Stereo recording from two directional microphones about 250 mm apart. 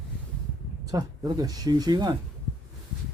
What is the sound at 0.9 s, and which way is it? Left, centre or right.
Speech, centre.